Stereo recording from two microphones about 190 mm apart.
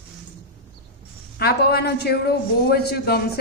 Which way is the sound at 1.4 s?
55° left (ahead or behind).